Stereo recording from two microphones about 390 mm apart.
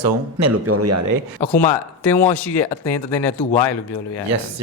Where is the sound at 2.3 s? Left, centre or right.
Left.